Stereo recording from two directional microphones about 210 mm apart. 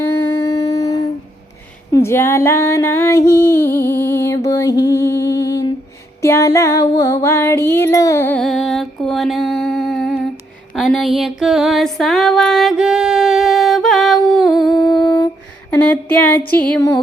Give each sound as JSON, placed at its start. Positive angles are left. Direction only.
{"t": 0.3, "sound": "humming", "side_deg": 15}
{"t": 1.9, "sound": "female singing", "side_deg": 10}
{"t": 6.2, "sound": "music", "side_deg": 15}
{"t": 15.7, "sound": "speech", "side_deg": 10}
{"t": 16.5, "sound": "a sound", "side_deg": 5}